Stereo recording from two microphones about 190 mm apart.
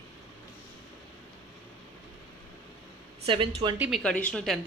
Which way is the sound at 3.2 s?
25° right (ahead or behind).